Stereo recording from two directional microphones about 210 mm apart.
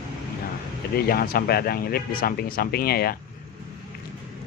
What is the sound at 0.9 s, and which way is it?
Speech, 45° left (ahead or behind).